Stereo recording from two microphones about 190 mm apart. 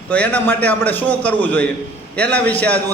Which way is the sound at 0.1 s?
10° left (ahead or behind).